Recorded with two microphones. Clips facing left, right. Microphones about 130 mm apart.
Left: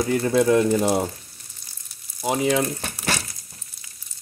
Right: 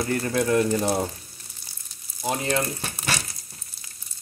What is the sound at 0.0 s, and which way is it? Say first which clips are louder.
Speech: left 5 dB; 20° left (ahead or behind).